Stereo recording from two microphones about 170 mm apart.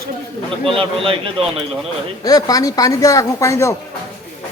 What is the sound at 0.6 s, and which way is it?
Speech, 30° right (ahead or behind).